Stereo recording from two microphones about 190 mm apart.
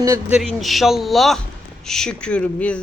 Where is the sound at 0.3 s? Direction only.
Centre (ahead or behind).